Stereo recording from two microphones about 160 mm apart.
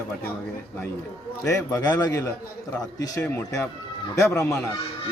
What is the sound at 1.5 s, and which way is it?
A man's voice, 20° left (ahead or behind).